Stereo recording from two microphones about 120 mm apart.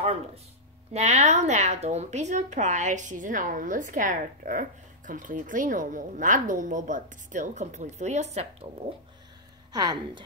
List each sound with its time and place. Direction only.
0.0 s a sound: 60° right (ahead or behind)
0.9 s a woman's voice: 70° right (ahead or behind)
9.7 s speech: 35° right (ahead or behind)